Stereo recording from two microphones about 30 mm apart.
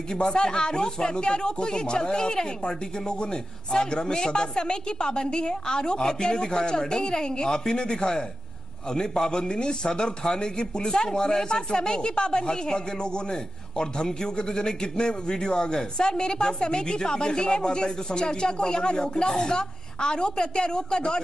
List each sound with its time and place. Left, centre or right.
0.1 s speech: left